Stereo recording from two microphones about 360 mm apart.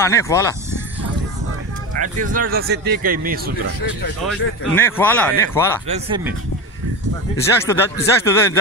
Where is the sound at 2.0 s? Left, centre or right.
Right.